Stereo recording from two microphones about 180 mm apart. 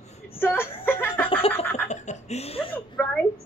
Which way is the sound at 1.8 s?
40° left (ahead or behind).